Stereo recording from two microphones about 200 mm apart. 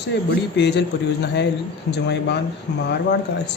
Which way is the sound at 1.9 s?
60° left (ahead or behind).